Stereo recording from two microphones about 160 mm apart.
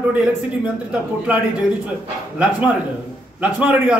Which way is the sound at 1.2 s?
10° right (ahead or behind).